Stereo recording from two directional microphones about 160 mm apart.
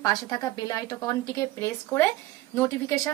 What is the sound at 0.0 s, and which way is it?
A woman's voice, 25° left (ahead or behind).